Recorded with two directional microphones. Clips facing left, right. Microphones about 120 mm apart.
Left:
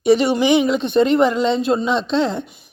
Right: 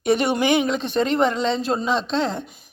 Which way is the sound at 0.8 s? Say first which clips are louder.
Left 6 dB; 30° right (ahead or behind).